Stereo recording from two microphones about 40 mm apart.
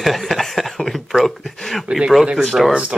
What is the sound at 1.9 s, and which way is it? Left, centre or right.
Speech, centre.